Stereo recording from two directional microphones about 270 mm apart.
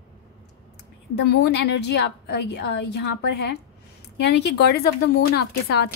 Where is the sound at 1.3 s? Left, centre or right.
Left.